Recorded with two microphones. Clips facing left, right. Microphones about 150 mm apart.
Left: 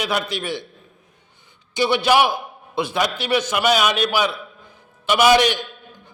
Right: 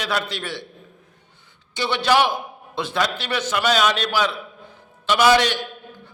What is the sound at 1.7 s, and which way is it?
A man's voice, 10° left (ahead or behind).